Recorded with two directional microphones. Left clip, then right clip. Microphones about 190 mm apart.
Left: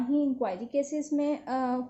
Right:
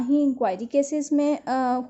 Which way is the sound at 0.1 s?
45° right (ahead or behind).